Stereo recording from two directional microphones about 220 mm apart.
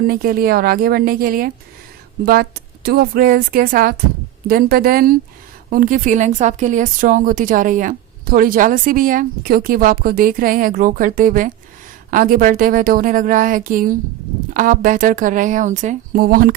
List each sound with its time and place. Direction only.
0.1 s a woman's voice: 40° right (ahead or behind)